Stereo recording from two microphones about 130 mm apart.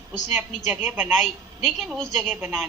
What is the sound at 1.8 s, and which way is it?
Speech, centre (ahead or behind).